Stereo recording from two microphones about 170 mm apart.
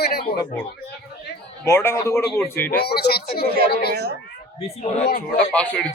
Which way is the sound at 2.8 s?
70° left (ahead or behind).